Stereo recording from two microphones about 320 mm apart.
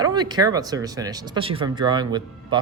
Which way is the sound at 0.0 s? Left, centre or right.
Centre.